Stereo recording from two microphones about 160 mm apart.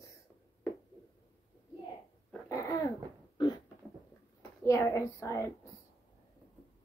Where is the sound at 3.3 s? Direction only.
25° left (ahead or behind).